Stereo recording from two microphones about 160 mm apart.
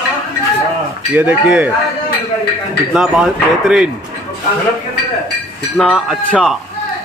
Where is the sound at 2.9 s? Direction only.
5° right (ahead or behind).